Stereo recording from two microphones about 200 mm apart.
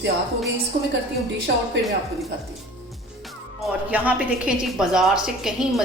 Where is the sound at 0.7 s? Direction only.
55° right (ahead or behind).